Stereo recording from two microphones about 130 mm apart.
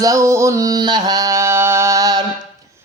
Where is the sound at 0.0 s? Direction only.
25° right (ahead or behind).